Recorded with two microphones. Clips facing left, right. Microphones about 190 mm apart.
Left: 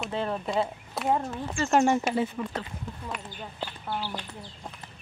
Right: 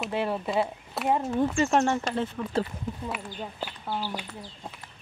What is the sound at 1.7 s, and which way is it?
Speech, 10° left (ahead or behind).